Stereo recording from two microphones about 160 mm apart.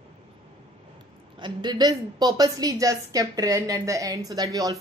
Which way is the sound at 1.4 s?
30° right (ahead or behind).